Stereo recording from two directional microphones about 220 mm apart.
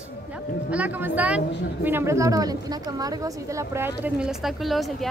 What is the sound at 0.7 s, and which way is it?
Speech, 5° right (ahead or behind).